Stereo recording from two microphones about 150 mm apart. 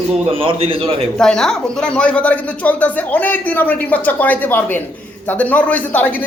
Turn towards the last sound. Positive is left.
turn(degrees=10)  # may be behind; listen again after turning